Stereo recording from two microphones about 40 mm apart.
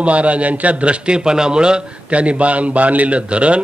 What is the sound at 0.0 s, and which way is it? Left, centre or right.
A man's voice, right.